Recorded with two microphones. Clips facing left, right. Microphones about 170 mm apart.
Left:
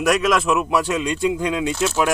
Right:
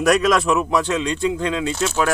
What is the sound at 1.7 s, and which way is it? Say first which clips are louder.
Speech: left 1 dB; centre (ahead or behind).